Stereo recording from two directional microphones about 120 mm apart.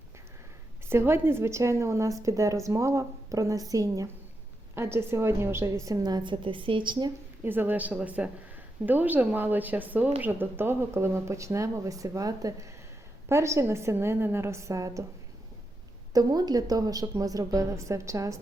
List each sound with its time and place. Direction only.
0.9 s a woman's voice: 20° right (ahead or behind); by 7.1 s 40° right (ahead or behind)
7.4 s a woman's voice: 15° right (ahead or behind)
16.1 s a woman's voice: 30° right (ahead or behind)